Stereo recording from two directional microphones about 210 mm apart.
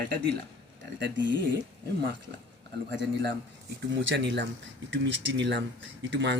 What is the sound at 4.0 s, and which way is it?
Speech, 60° right (ahead or behind).